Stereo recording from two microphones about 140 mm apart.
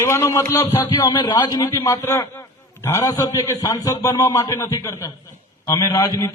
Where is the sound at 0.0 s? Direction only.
20° left (ahead or behind).